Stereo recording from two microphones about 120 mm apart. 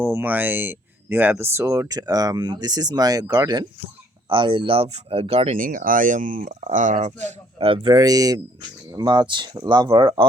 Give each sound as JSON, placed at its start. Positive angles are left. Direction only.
{"t": 0.0, "sound": "speech", "side_deg": -20}
{"t": 5.5, "sound": "speech", "side_deg": -90}
{"t": 7.7, "sound": "speech", "side_deg": -45}
{"t": 7.9, "sound": "speech", "side_deg": -30}